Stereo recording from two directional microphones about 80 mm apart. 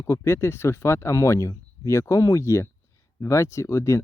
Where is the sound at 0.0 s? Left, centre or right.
Left.